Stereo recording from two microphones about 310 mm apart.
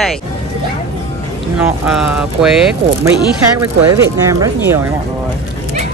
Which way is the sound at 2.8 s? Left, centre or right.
Centre.